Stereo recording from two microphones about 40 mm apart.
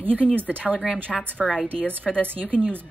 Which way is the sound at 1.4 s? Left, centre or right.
Centre.